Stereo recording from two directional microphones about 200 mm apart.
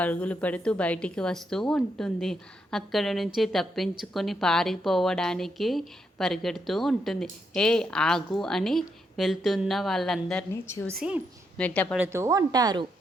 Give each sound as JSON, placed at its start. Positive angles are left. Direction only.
{"t": 0.0, "sound": "a woman's voice", "side_deg": 5}
{"t": 10.5, "sound": "speech", "side_deg": 15}
{"t": 10.9, "sound": "a woman's voice", "side_deg": -5}
{"t": 11.5, "sound": "speech", "side_deg": 5}
{"t": 11.9, "sound": "speech", "side_deg": -10}